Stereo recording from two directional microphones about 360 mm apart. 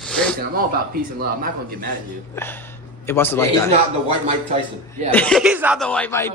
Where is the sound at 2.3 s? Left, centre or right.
Centre.